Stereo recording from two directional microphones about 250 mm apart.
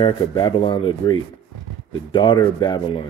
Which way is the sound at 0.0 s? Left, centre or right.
Centre.